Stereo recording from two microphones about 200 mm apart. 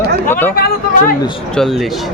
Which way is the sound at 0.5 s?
45° left (ahead or behind).